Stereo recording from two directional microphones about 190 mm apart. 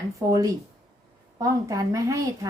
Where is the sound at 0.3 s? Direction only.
20° right (ahead or behind).